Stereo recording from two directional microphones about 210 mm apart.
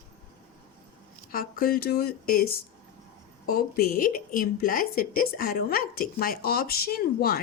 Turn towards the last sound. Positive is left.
turn(degrees=45)  # may be behind; listen again after turning